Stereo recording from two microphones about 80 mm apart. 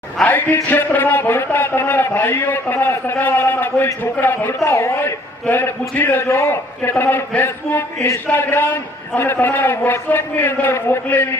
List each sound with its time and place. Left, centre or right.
0.3 s speech: left